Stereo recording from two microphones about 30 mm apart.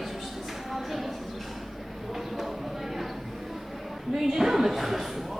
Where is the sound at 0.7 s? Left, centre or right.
Centre.